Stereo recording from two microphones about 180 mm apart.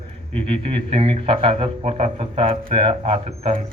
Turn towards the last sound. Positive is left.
turn(degrees=-30)  # may be behind; listen again after turning